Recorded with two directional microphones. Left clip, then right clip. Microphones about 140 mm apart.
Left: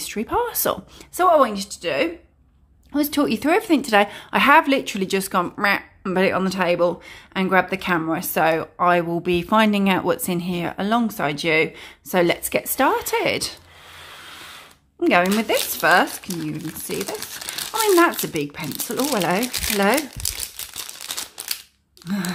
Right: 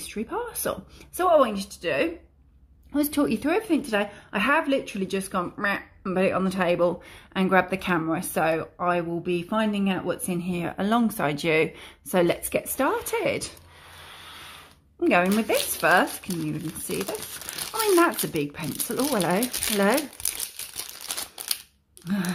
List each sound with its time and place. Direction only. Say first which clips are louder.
0.0 s speech: left 8 dB; 20° left (ahead or behind)
1.1 s speech: left 4 dB; 15° left (ahead or behind)
10.4 s speech: left 4 dB; 10° left (ahead or behind)
15.0 s speech: left 4 dB; 10° left (ahead or behind)
22.0 s speech: left 2 dB; 5° left (ahead or behind)